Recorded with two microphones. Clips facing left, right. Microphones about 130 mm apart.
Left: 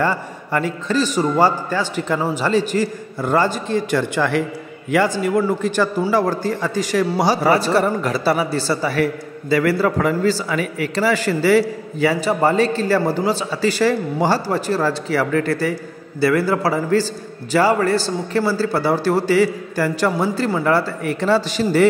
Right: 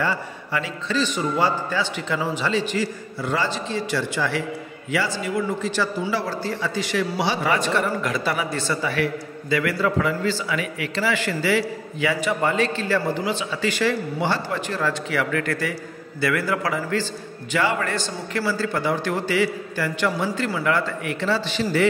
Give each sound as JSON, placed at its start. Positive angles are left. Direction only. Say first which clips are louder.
{"t": 0.0, "sound": "a man's voice", "louder": "left 5 dB", "side_deg": 45}